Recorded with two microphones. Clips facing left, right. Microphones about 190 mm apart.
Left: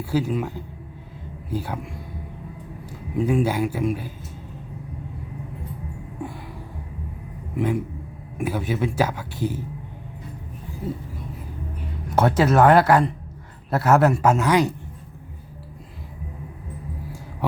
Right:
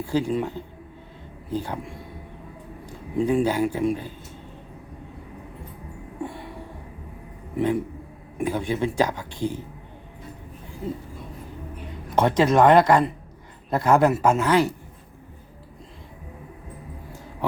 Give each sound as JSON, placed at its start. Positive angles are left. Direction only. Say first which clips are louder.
{"t": 0.0, "sound": "speech", "louder": "even", "side_deg": 10}
{"t": 3.2, "sound": "speech", "louder": "even", "side_deg": 5}
{"t": 6.2, "sound": "music", "louder": "right 1 dB", "side_deg": 0}
{"t": 7.5, "sound": "speech", "louder": "right 1 dB", "side_deg": 5}
{"t": 12.1, "sound": "a man's voice", "louder": "even", "side_deg": 5}
{"t": 14.3, "sound": "speech", "louder": "left 1 dB", "side_deg": 15}